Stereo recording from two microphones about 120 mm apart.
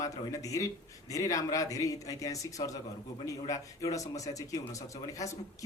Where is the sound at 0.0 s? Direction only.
25° left (ahead or behind).